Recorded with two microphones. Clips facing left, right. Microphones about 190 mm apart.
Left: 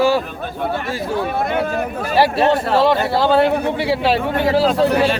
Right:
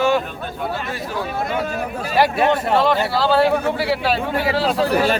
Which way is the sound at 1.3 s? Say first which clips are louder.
Left 3 dB; 55° left (ahead or behind).